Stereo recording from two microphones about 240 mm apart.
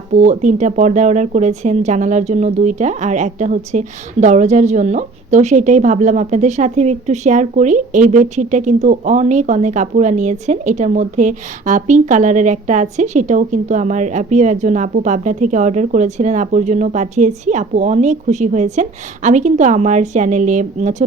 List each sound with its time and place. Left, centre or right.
0.2 s speech: right